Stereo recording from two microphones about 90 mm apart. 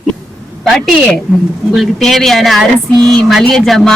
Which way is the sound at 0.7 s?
5° left (ahead or behind).